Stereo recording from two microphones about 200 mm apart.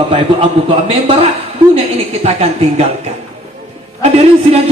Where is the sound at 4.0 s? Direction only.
30° right (ahead or behind).